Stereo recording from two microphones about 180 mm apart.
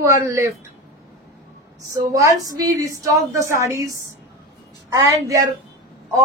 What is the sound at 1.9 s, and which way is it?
Speech, 20° right (ahead or behind).